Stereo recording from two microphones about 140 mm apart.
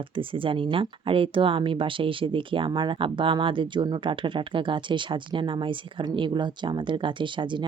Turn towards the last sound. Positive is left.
turn(degrees=-35)  # may be behind; listen again after turning